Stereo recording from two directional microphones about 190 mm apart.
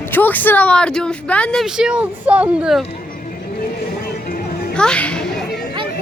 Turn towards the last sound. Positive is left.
turn(degrees=5)  # may be behind; listen again after turning